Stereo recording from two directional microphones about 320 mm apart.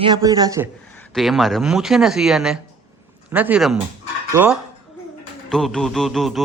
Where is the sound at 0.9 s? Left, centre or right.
Centre.